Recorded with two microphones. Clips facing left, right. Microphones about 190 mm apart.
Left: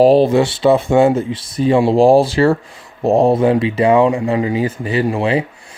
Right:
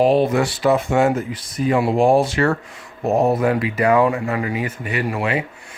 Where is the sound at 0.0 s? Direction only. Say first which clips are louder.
Left 5 dB; 35° left (ahead or behind).